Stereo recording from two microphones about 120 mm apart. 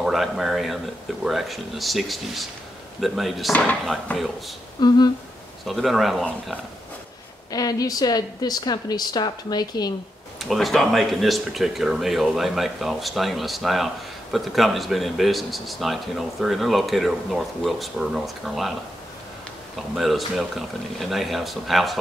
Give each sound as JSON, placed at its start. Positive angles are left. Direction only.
{"t": 0.0, "sound": "speech", "side_deg": 0}
{"t": 4.7, "sound": "a woman's voice", "side_deg": 35}
{"t": 5.7, "sound": "speech", "side_deg": 0}
{"t": 7.5, "sound": "a woman's voice", "side_deg": 30}
{"t": 10.4, "sound": "speech", "side_deg": 0}
{"t": 20.0, "sound": "speech", "side_deg": 0}